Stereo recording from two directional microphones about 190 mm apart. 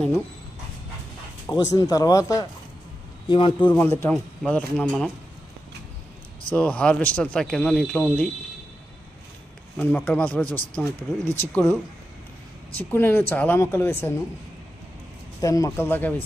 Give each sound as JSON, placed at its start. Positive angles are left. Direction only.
{"t": 1.5, "sound": "speech", "side_deg": 15}
{"t": 3.7, "sound": "speech", "side_deg": 15}
{"t": 6.5, "sound": "speech", "side_deg": 5}
{"t": 9.8, "sound": "speech", "side_deg": 10}
{"t": 12.9, "sound": "speech", "side_deg": 10}
{"t": 15.4, "sound": "speech", "side_deg": 15}